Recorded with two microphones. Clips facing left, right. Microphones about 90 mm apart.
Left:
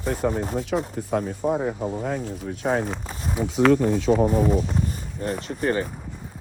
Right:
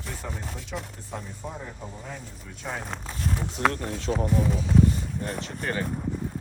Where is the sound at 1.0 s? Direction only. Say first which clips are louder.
Left 12 dB; 65° left (ahead or behind).